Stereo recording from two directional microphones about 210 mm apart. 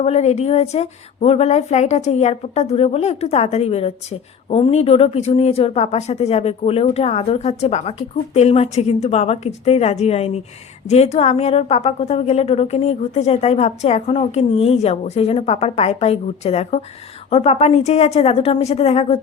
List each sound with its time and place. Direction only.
0.0 s a woman's voice: 30° left (ahead or behind)